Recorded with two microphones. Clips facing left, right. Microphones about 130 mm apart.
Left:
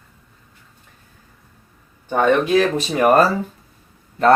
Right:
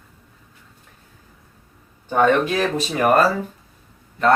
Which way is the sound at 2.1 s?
Centre (ahead or behind).